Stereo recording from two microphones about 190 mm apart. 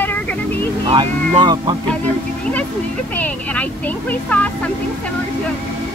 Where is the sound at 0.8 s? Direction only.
25° right (ahead or behind).